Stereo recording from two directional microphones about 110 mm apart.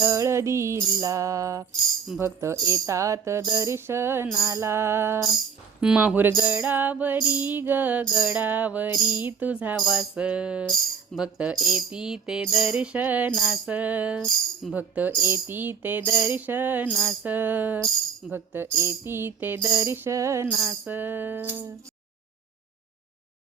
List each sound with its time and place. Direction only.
0.0 s music: 30° right (ahead or behind)
5.8 s music: 5° right (ahead or behind)
9.8 s music: centre (ahead or behind)
10.7 s speech: centre (ahead or behind)
11.3 s music: 5° right (ahead or behind)
13.3 s music: centre (ahead or behind)
13.7 s music: 15° right (ahead or behind)